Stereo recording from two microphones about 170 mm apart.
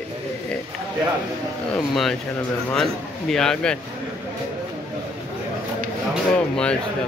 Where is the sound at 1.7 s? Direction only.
Centre (ahead or behind).